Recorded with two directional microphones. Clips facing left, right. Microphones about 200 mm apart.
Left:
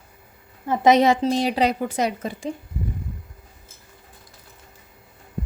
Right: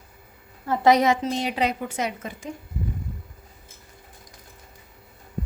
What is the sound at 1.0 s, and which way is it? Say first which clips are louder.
A woman's voice: left 4 dB; 35° left (ahead or behind).